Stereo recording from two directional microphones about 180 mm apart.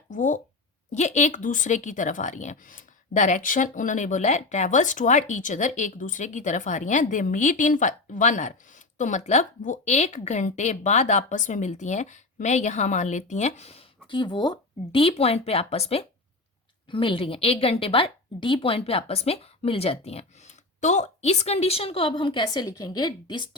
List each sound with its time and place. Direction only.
0.1 s speech: 45° left (ahead or behind); by 23.5 s 25° left (ahead or behind)